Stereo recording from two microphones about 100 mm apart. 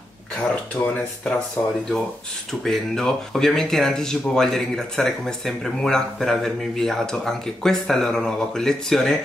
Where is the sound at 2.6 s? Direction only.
5° left (ahead or behind).